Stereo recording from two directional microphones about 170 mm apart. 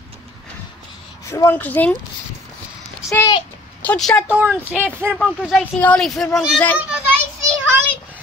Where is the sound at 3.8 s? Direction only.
5° left (ahead or behind).